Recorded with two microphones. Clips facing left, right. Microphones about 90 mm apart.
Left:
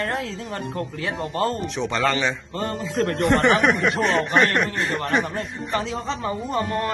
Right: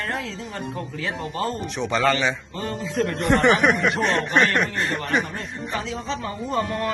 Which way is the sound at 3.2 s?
Centre (ahead or behind).